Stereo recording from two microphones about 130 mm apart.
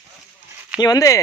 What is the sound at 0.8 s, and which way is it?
Speech, 30° left (ahead or behind).